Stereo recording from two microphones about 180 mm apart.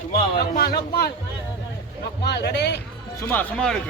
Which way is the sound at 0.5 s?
60° left (ahead or behind).